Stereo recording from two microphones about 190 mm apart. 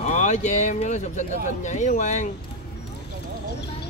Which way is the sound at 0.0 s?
40° left (ahead or behind).